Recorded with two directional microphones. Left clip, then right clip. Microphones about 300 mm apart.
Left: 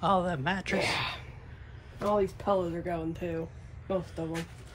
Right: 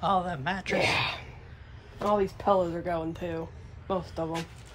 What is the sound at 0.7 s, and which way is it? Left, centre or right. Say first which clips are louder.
A man's voice: right 7 dB; right.